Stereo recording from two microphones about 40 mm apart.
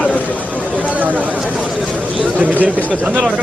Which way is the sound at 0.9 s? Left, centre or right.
Right.